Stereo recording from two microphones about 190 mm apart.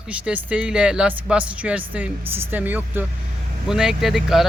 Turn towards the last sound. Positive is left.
turn(degrees=0)  # may be behind; listen again after turning